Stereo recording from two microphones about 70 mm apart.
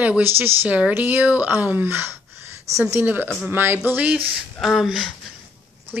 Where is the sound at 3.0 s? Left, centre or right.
Right.